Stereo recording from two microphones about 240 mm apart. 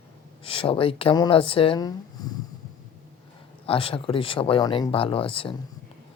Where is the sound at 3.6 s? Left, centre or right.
Left.